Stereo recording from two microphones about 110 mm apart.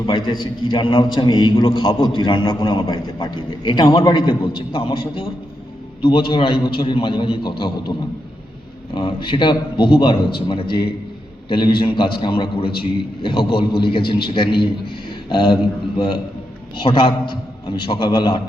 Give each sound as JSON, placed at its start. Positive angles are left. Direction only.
{"t": 0.0, "sound": "a man's voice", "side_deg": 45}
{"t": 9.0, "sound": "a man's voice", "side_deg": 45}